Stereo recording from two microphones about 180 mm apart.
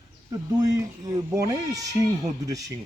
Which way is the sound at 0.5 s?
20° right (ahead or behind).